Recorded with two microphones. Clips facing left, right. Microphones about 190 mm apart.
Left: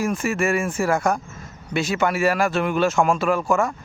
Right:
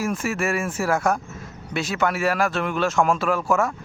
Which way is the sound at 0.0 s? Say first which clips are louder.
Left 2 dB; 5° right (ahead or behind).